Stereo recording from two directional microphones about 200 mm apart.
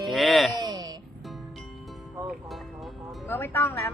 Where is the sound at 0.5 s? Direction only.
20° right (ahead or behind).